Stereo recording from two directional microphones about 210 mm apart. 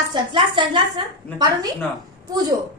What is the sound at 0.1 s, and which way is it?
A woman's voice, 25° right (ahead or behind).